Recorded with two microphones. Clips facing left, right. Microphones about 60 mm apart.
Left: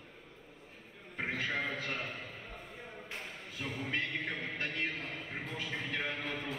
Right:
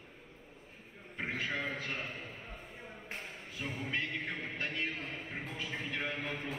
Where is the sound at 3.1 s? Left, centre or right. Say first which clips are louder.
Even; left.